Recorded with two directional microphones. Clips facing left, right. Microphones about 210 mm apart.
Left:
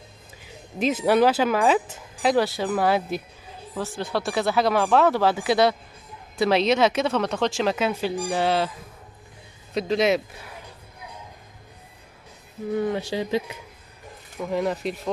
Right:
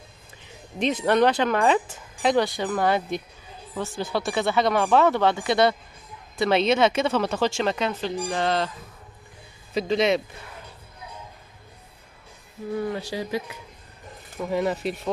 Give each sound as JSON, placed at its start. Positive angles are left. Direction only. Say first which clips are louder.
{"t": 0.7, "sound": "speech", "louder": "left 1 dB", "side_deg": 5}
{"t": 9.8, "sound": "speech", "louder": "even", "side_deg": 0}
{"t": 12.8, "sound": "speech", "louder": "left 3 dB", "side_deg": 20}
{"t": 14.4, "sound": "speech", "louder": "even", "side_deg": 0}